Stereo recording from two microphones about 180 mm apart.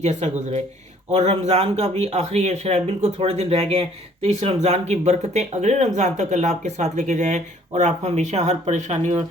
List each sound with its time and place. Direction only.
0.0 s speech: 40° right (ahead or behind)